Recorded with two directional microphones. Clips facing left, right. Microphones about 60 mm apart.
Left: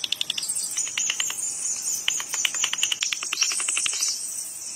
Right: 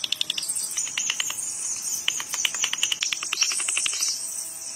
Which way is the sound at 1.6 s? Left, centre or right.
Right.